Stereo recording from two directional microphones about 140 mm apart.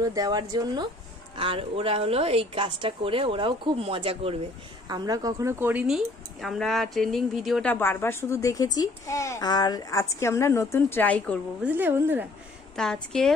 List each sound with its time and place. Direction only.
0.0 s a woman's voice: 25° right (ahead or behind)
1.4 s a woman's voice: 40° right (ahead or behind)
4.8 s speech: 30° right (ahead or behind); by 7.6 s centre (ahead or behind)
7.6 s a woman's voice: 15° left (ahead or behind)
11.6 s speech: 15° right (ahead or behind)
12.7 s speech: 5° left (ahead or behind)